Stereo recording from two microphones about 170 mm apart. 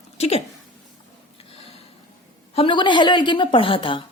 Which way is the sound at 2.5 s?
30° left (ahead or behind).